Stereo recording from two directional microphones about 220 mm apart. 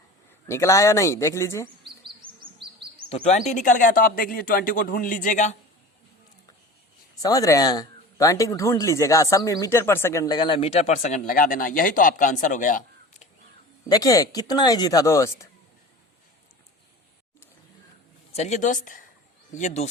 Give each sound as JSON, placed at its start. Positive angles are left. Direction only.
{"t": 0.4, "sound": "speech", "side_deg": 10}
{"t": 3.1, "sound": "speech", "side_deg": 30}
{"t": 7.2, "sound": "speech", "side_deg": 15}
{"t": 13.8, "sound": "speech", "side_deg": 15}
{"t": 18.3, "sound": "speech", "side_deg": 30}